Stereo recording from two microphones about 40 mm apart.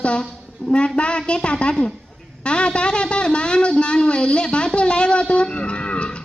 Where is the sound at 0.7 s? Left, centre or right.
Left.